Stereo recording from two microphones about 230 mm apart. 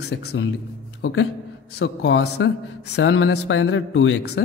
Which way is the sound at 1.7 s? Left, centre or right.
Left.